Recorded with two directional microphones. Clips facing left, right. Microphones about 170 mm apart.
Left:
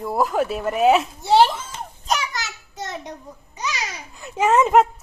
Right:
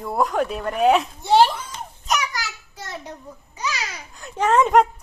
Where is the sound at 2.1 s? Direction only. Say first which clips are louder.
Even; 25° left (ahead or behind).